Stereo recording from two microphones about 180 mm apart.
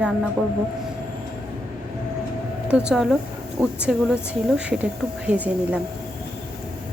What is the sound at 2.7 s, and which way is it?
Speech, 5° right (ahead or behind).